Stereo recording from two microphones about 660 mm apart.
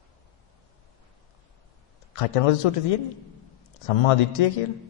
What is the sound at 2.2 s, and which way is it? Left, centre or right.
Speech, left.